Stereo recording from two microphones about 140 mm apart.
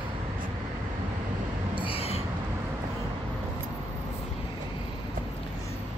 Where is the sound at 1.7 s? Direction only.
40° left (ahead or behind).